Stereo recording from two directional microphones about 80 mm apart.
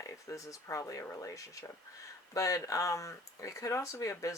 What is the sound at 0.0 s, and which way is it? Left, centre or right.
Speech, left.